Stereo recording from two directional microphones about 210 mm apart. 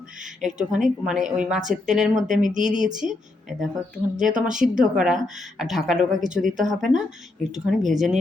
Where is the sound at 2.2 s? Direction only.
35° right (ahead or behind).